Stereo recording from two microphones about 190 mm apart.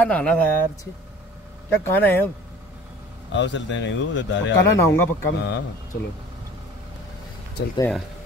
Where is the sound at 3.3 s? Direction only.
70° left (ahead or behind).